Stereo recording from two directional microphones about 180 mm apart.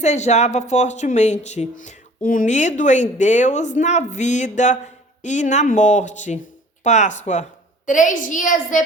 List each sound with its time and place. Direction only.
0.0 s a child's voice: 40° left (ahead or behind)